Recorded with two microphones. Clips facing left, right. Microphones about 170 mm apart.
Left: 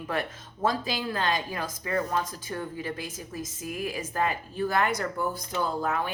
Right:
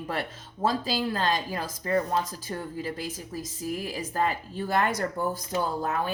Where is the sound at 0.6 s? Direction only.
35° right (ahead or behind).